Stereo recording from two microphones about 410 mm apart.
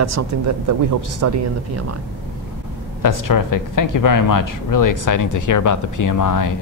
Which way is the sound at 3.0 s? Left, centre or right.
Left.